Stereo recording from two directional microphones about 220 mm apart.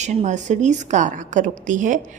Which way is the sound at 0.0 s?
30° right (ahead or behind).